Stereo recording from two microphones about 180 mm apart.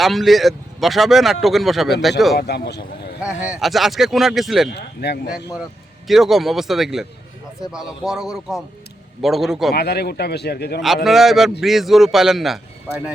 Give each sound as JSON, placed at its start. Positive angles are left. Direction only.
{"t": 0.0, "sound": "speech", "side_deg": 0}
{"t": 2.5, "sound": "speech", "side_deg": 70}
{"t": 3.2, "sound": "speech", "side_deg": -5}
{"t": 4.7, "sound": "speech", "side_deg": 60}
{"t": 6.1, "sound": "speech", "side_deg": 0}
{"t": 9.7, "sound": "speech", "side_deg": 65}
{"t": 10.8, "sound": "speech", "side_deg": 0}